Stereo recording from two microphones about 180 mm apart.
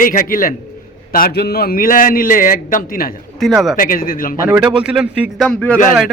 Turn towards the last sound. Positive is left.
turn(degrees=5)  # may be behind; listen again after turning